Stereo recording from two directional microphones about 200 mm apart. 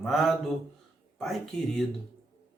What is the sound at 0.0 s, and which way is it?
Speech, centre (ahead or behind).